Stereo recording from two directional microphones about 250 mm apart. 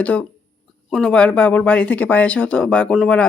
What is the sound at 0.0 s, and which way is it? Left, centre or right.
Speech, centre.